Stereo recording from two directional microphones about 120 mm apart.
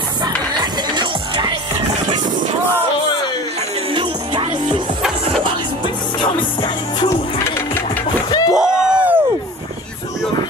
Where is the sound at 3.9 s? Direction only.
45° right (ahead or behind).